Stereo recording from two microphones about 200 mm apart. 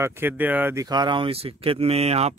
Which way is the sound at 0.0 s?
10° right (ahead or behind).